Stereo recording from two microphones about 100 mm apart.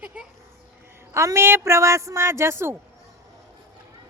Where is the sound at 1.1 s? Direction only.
30° right (ahead or behind).